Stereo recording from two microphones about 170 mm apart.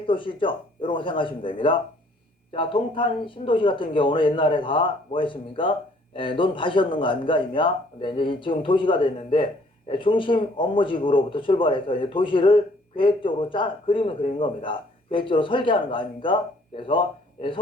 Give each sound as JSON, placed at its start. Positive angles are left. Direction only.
{"t": 0.0, "sound": "speech", "side_deg": 30}